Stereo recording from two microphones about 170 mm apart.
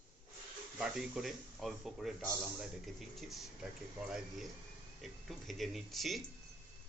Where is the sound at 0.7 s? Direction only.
5° right (ahead or behind).